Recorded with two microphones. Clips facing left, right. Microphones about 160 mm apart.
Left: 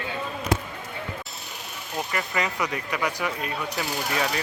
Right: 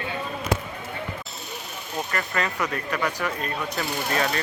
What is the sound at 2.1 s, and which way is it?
Speech, 10° left (ahead or behind).